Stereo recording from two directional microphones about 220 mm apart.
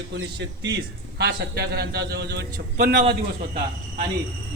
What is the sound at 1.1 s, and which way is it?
Speech, 50° right (ahead or behind).